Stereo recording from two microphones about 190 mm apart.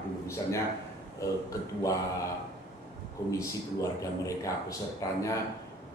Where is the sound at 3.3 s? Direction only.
15° left (ahead or behind).